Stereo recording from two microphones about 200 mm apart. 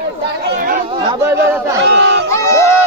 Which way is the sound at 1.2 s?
10° right (ahead or behind).